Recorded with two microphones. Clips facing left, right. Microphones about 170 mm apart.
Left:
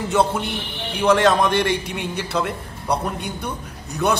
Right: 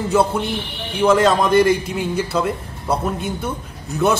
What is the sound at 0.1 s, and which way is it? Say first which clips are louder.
A man's voice: right 2 dB; centre (ahead or behind).